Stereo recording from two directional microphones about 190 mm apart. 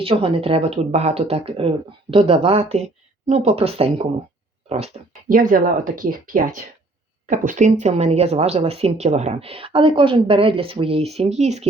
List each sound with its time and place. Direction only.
0.0 s a woman's voice: 30° right (ahead or behind)
5.3 s a woman's voice: 45° right (ahead or behind)